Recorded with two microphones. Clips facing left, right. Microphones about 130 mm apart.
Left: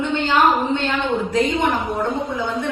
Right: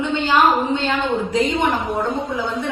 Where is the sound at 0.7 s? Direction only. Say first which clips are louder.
Right 1 dB; 15° right (ahead or behind).